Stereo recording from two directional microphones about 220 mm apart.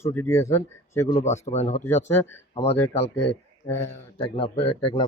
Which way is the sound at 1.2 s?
30° left (ahead or behind).